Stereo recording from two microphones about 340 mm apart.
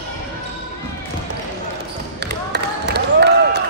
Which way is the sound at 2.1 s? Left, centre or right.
Right.